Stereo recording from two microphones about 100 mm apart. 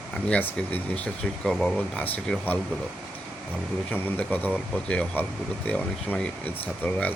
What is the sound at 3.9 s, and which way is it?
Speech, 15° left (ahead or behind).